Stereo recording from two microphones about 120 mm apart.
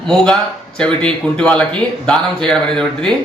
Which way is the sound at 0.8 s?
5° left (ahead or behind).